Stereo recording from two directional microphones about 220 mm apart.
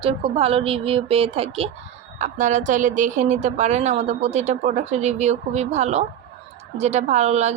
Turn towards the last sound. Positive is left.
turn(degrees=-30)  # may be behind; listen again after turning